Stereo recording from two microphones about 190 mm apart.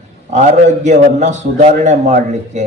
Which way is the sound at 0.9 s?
40° right (ahead or behind).